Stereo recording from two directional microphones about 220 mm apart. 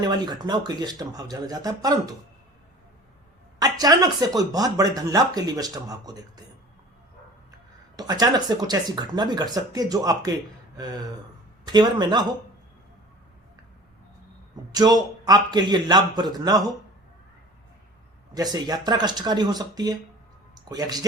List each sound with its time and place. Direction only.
0.0 s speech: 20° right (ahead or behind)
3.6 s speech: 15° right (ahead or behind)
7.9 s a man's voice: 15° right (ahead or behind)
14.5 s a man's voice: 15° right (ahead or behind)
18.3 s speech: 15° right (ahead or behind)